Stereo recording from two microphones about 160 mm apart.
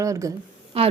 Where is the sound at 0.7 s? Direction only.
35° right (ahead or behind).